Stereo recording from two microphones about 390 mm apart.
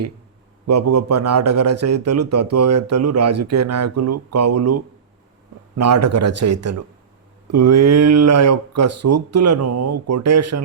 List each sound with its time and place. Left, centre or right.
0.7 s a man's voice: right